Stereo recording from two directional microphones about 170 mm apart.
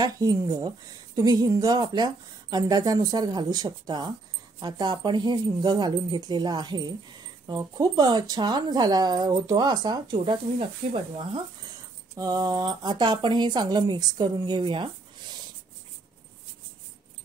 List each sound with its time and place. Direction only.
0.0 s speech: 25° right (ahead or behind)
12.2 s speech: 20° right (ahead or behind)